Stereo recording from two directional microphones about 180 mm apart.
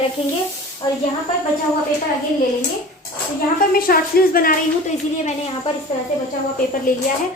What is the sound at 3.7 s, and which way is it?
Speech, 55° left (ahead or behind).